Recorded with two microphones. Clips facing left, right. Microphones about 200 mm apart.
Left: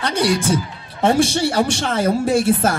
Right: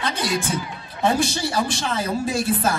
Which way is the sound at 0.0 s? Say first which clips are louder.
Left 6 dB; 75° left (ahead or behind).